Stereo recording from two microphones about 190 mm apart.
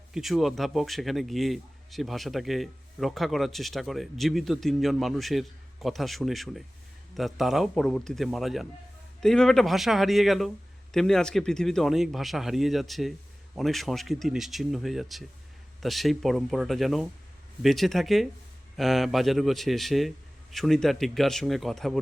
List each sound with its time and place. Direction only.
0.1 s a man's voice: centre (ahead or behind)